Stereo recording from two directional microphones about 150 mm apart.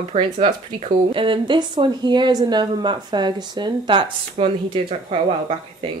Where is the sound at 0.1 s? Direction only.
35° right (ahead or behind).